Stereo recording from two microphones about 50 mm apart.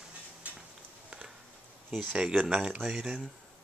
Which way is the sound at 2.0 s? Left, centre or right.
Right.